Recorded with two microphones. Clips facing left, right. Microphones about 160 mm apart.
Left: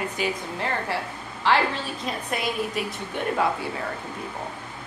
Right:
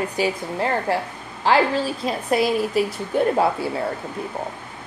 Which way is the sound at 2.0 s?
35° right (ahead or behind).